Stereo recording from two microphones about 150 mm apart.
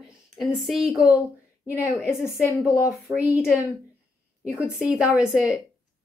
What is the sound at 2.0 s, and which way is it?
Speech, 15° left (ahead or behind).